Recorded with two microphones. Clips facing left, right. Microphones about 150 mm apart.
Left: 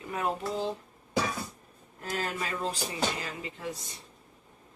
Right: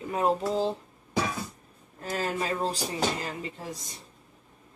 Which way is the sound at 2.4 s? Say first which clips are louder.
Right 4 dB; 35° right (ahead or behind).